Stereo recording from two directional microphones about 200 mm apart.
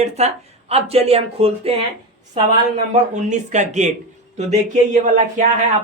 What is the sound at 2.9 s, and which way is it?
Speech, 35° right (ahead or behind).